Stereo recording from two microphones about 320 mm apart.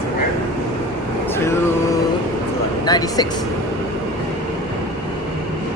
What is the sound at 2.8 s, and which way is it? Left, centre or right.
Speech, centre.